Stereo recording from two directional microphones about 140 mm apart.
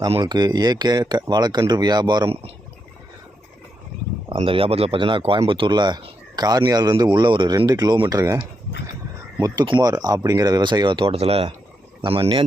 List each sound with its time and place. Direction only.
0.2 s speech: 30° right (ahead or behind)
4.4 s speech: 40° right (ahead or behind)
9.4 s speech: 30° right (ahead or behind)